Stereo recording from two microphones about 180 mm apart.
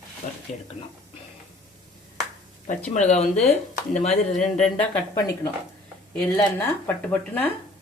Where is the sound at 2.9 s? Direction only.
40° left (ahead or behind).